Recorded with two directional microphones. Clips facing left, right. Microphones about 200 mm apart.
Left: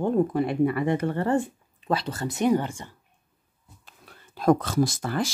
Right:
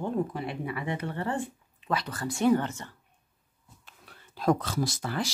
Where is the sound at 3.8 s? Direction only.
45° left (ahead or behind).